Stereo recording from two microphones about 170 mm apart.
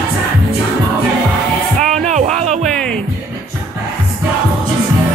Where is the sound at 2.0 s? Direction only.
40° right (ahead or behind).